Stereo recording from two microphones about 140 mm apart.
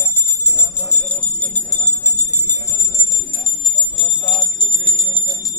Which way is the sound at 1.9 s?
10° left (ahead or behind).